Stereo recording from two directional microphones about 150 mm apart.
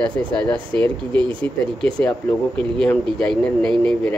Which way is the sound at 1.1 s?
35° right (ahead or behind).